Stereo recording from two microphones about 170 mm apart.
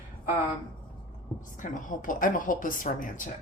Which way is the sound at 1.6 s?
50° left (ahead or behind).